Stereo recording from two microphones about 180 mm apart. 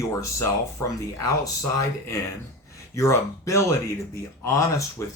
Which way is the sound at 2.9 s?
15° left (ahead or behind).